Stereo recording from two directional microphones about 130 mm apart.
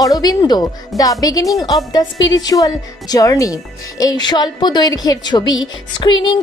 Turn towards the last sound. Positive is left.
turn(degrees=30)  # may be behind; listen again after turning